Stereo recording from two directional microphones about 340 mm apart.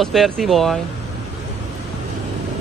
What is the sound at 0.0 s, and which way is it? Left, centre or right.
Speech, centre.